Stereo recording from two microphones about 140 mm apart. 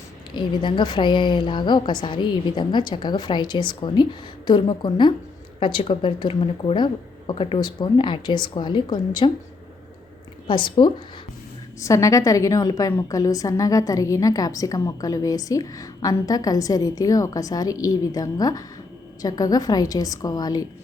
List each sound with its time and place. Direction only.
0.3 s speech: 35° left (ahead or behind)
10.4 s speech: 35° left (ahead or behind)
11.8 s a woman's voice: 20° left (ahead or behind)